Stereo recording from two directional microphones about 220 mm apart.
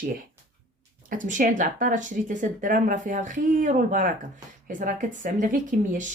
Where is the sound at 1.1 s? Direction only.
35° right (ahead or behind).